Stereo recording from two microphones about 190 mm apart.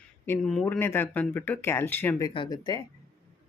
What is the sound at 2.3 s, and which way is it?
Speech, 25° left (ahead or behind).